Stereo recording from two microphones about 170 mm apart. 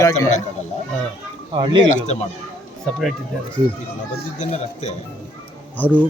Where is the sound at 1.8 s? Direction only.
40° left (ahead or behind).